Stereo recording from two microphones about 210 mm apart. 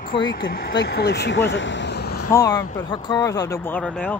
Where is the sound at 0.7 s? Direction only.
55° left (ahead or behind).